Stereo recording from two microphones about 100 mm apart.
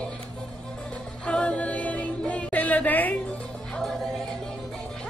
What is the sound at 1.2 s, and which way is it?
Music, 15° left (ahead or behind).